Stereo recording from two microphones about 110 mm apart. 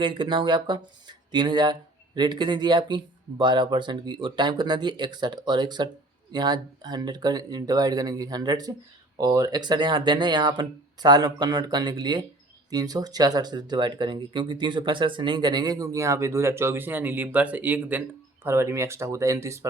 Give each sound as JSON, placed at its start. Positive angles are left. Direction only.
{"t": 0.0, "sound": "speech", "side_deg": -50}